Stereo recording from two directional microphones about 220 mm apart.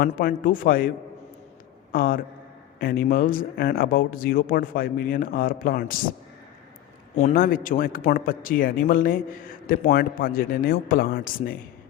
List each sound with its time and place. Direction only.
0.0 s a man's voice: 40° left (ahead or behind)
7.2 s speech: 35° left (ahead or behind)